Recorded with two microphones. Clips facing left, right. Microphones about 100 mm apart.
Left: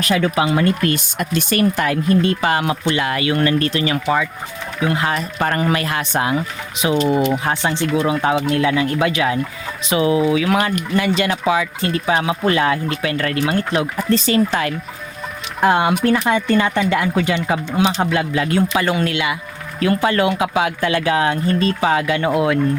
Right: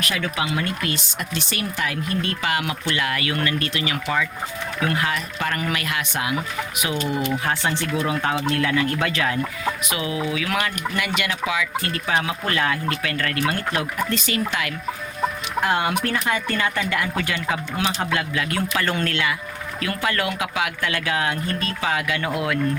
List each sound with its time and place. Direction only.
0.0 s speech: 35° left (ahead or behind)
2.0 s speech: 30° left (ahead or behind)
4.8 s speech: 20° left (ahead or behind)
5.0 s speech: 40° left (ahead or behind); by 9.4 s 15° left (ahead or behind)
9.9 s speech: 30° left (ahead or behind)
11.9 s speech: 20° left (ahead or behind)
14.1 s speech: 35° left (ahead or behind)
18.9 s speech: 10° left (ahead or behind)
19.8 s speech: 25° left (ahead or behind)